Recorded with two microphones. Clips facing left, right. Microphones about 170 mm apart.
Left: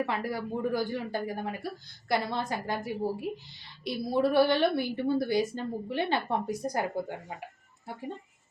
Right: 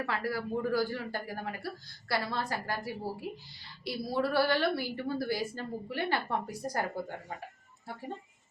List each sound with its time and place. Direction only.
0.0 s a woman's voice: 20° left (ahead or behind)